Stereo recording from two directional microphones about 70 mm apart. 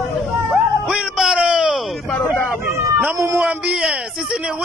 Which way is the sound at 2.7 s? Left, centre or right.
Right.